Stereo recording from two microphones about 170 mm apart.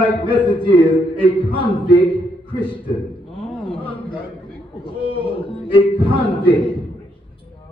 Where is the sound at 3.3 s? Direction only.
30° left (ahead or behind).